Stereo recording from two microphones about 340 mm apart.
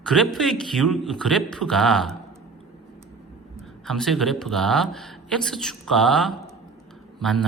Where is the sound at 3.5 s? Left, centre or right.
Centre.